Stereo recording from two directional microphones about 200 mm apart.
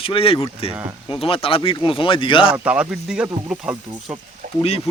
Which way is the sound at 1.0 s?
25° left (ahead or behind).